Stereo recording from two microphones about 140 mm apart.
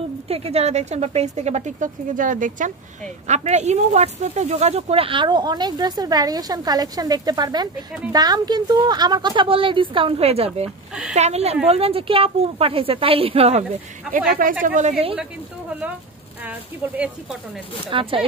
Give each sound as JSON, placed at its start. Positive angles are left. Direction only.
{"t": 0.3, "sound": "a woman's voice", "side_deg": -45}
{"t": 3.3, "sound": "a woman's voice", "side_deg": -55}
{"t": 14.0, "sound": "speech", "side_deg": -5}
{"t": 14.6, "sound": "a woman's voice", "side_deg": -60}
{"t": 16.4, "sound": "speech", "side_deg": -10}
{"t": 17.8, "sound": "a woman's voice", "side_deg": -40}